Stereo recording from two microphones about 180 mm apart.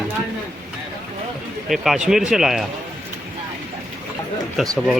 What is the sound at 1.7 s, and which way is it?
Speech, centre (ahead or behind).